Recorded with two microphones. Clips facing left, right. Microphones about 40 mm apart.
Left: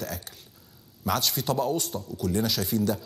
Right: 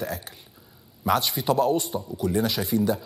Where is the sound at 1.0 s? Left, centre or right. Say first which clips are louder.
Right 4 dB; centre.